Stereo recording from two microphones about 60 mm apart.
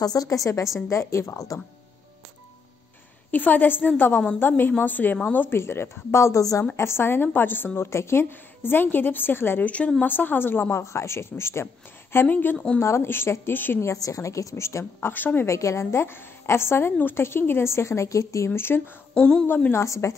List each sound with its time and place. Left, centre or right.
0.0 s a woman's voice: left
3.3 s a woman's voice: left
5.6 s a woman's voice: left
10.8 s a woman's voice: left
12.3 s a woman's voice: left
12.7 s a woman's voice: left
13.9 s a woman's voice: left
15.4 s a woman's voice: left
18.5 s a woman's voice: left
19.1 s a woman's voice: centre
19.7 s a woman's voice: left